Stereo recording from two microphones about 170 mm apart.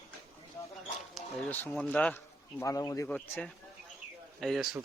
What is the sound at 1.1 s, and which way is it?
Speech, 10° left (ahead or behind).